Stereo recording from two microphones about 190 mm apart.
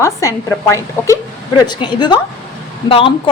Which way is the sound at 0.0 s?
15° left (ahead or behind).